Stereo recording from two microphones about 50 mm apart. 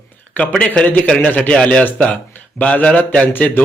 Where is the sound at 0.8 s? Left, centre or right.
Centre.